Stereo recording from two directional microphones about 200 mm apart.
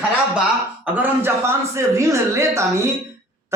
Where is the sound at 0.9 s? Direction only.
10° right (ahead or behind).